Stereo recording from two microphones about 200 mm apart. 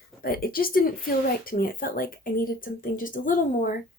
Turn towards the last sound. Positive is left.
turn(degrees=45)  # may be behind; listen again after turning